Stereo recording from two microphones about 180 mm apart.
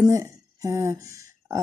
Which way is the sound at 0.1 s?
15° right (ahead or behind).